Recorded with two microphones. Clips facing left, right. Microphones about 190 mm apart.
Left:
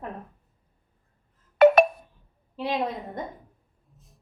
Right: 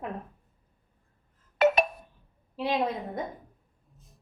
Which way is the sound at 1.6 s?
55° left (ahead or behind).